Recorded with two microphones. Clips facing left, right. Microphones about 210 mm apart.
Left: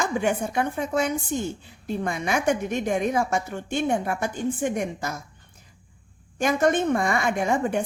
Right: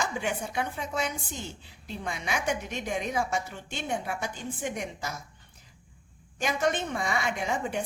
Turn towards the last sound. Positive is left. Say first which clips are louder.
# left 7 dB
turn(degrees=50)  # may be behind; listen again after turning